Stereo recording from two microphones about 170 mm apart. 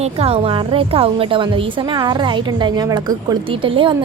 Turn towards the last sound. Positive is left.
turn(degrees=-30)  # may be behind; listen again after turning